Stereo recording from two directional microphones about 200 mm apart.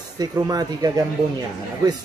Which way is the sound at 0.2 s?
20° right (ahead or behind).